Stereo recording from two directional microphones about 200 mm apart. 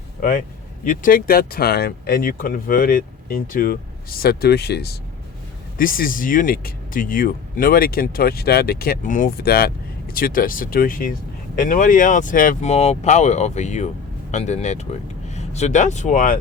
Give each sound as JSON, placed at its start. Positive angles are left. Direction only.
{"t": 0.2, "sound": "speech", "side_deg": 40}